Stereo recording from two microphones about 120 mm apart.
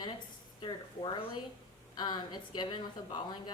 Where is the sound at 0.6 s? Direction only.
45° left (ahead or behind).